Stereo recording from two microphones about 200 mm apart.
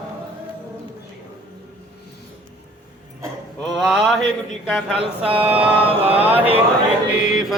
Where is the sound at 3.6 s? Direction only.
Centre (ahead or behind).